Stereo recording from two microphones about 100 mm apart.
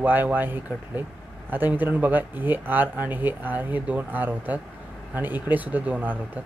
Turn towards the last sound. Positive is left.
turn(degrees=-15)  # may be behind; listen again after turning